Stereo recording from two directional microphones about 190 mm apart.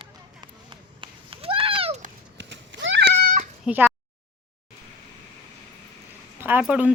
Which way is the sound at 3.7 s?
10° right (ahead or behind).